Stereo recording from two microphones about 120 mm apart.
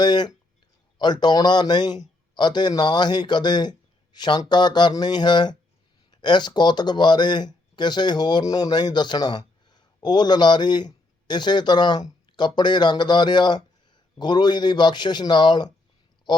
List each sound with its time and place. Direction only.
0.0 s a man's voice: 35° left (ahead or behind)